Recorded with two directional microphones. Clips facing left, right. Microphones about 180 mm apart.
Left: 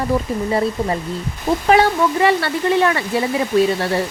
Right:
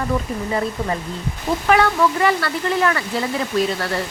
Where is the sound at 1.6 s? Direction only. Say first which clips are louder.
Left 2 dB; 25° left (ahead or behind).